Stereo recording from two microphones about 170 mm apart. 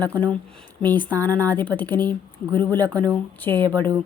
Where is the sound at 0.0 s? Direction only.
10° left (ahead or behind).